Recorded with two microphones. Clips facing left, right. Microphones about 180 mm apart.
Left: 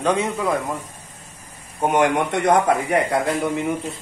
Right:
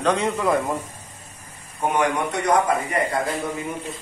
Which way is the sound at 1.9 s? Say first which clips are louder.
Left 4 dB; 65° left (ahead or behind).